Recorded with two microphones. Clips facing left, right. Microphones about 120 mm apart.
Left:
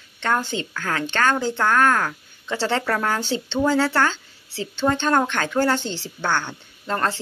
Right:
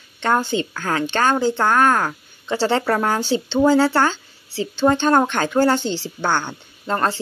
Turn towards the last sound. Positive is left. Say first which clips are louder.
# right 3 dB
turn(degrees=-15)  # may be behind; listen again after turning